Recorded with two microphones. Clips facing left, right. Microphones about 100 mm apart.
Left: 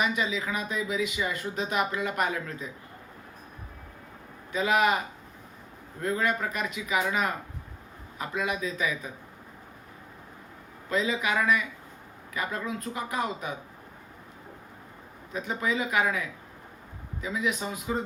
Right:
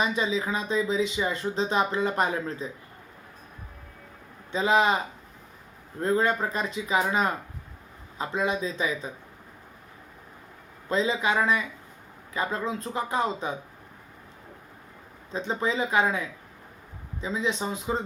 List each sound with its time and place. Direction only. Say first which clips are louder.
0.0 s speech: right 2 dB; 30° right (ahead or behind)
4.5 s speech: right 2 dB; 25° right (ahead or behind)
6.0 s a man's voice: right 4 dB; 30° right (ahead or behind)
10.8 s speech: right 3 dB; 30° right (ahead or behind)
15.3 s speech: right 2 dB; 30° right (ahead or behind)